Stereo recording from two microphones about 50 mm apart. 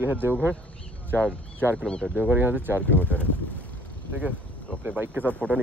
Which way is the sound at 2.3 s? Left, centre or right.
Right.